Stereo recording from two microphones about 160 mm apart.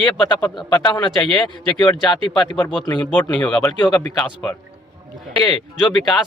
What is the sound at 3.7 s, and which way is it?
Speech, 25° left (ahead or behind).